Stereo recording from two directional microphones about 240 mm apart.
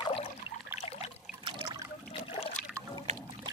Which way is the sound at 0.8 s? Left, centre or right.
Left.